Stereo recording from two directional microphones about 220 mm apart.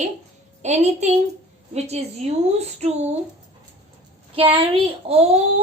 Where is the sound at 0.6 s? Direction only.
30° right (ahead or behind).